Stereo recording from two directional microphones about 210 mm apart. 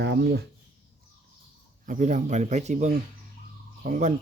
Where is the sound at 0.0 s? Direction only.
55° right (ahead or behind).